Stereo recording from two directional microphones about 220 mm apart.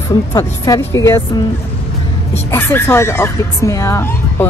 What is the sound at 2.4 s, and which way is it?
Speech, 10° left (ahead or behind).